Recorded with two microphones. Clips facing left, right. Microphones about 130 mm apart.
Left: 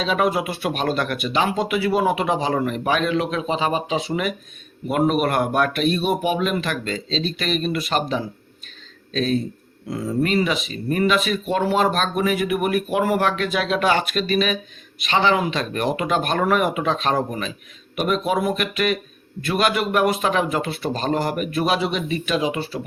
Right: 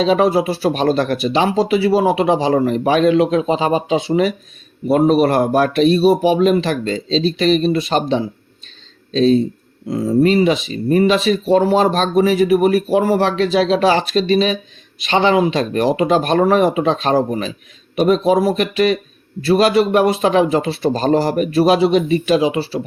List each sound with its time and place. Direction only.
0.0 s speech: 35° right (ahead or behind)